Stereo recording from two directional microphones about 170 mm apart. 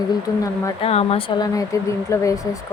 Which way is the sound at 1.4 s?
20° left (ahead or behind).